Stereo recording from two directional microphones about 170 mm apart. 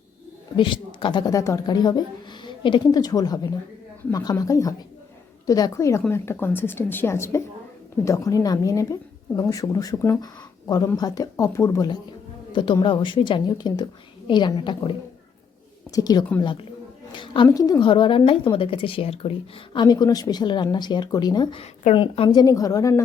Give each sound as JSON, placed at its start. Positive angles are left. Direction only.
{"t": 0.5, "sound": "a woman's voice", "side_deg": 30}